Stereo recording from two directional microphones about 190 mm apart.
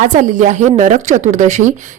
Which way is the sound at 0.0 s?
40° right (ahead or behind).